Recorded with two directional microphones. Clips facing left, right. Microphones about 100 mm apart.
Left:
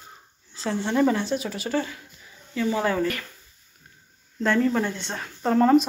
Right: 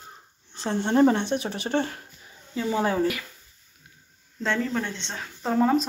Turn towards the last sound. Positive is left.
turn(degrees=0)  # may be behind; listen again after turning